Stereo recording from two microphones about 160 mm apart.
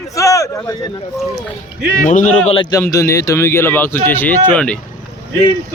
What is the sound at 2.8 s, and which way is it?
Speech, 15° left (ahead or behind).